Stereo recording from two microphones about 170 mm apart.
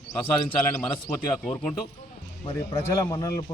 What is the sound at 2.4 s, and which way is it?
Speech, 35° left (ahead or behind).